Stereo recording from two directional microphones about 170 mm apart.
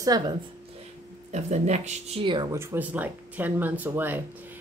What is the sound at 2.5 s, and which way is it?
Speech, 15° right (ahead or behind).